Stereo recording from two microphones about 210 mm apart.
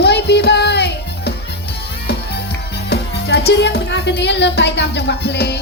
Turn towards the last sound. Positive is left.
turn(degrees=50)  # may be behind; listen again after turning